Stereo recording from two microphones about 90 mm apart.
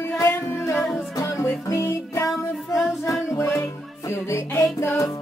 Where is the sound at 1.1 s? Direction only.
35° left (ahead or behind).